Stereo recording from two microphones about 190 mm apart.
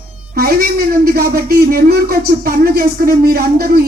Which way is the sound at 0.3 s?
55° right (ahead or behind).